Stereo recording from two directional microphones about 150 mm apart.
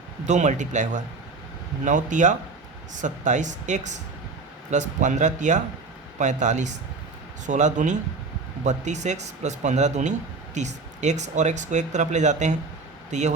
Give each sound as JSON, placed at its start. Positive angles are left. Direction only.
{"t": 0.3, "sound": "speech", "side_deg": -50}